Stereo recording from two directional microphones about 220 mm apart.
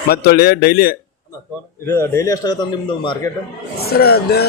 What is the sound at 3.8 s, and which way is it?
Speech, 45° left (ahead or behind).